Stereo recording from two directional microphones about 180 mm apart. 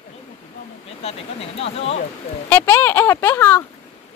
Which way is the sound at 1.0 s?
35° left (ahead or behind).